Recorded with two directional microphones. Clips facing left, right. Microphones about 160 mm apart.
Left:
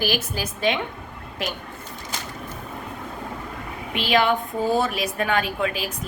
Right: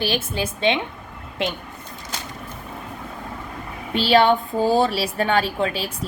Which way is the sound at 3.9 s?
30° right (ahead or behind).